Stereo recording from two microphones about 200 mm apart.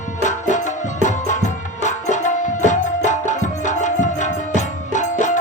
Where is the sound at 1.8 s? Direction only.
35° left (ahead or behind).